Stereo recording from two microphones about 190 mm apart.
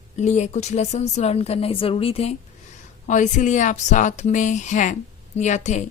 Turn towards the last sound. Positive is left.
turn(degrees=40)  # may be behind; listen again after turning